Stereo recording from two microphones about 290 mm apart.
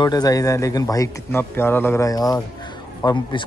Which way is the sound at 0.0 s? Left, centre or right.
Centre.